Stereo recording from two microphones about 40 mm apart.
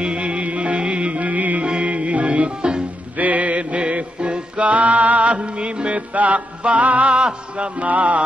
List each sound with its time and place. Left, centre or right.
0.0 s music: right
3.2 s music: right